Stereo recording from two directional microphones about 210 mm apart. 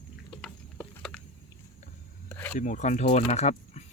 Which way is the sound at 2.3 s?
10° left (ahead or behind).